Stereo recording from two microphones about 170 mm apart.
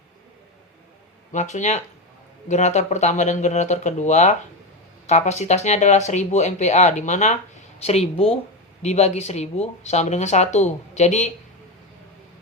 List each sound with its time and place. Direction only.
1.3 s speech: 45° left (ahead or behind)